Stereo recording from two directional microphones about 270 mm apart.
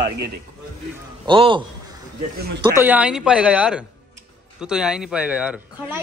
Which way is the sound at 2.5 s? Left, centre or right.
Centre.